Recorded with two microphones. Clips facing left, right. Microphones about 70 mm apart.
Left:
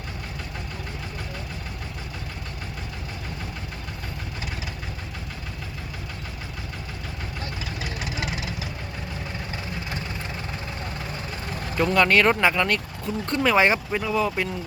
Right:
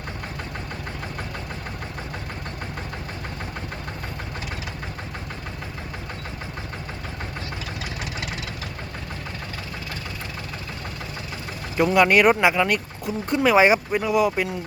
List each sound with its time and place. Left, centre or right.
8.0 s engine: centre
11.8 s speech: centre